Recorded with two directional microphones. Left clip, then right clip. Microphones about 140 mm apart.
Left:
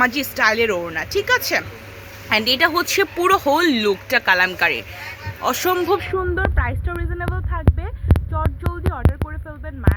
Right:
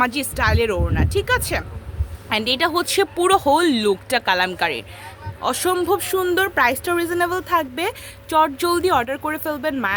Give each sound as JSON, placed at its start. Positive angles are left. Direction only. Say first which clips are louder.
{"t": 0.0, "sound": "speech", "louder": "left 3 dB", "side_deg": -20}
{"t": 5.4, "sound": "speech", "louder": "left 1 dB", "side_deg": -15}